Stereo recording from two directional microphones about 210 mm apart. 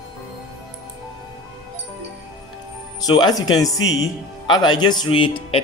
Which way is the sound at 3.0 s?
20° left (ahead or behind).